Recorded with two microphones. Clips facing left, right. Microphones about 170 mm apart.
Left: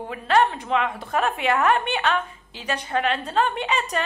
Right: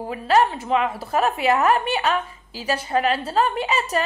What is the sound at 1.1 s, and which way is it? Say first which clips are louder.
Speech: right 3 dB; 35° right (ahead or behind).